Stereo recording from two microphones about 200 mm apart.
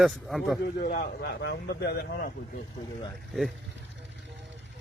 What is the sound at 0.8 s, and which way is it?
Speech, 40° left (ahead or behind).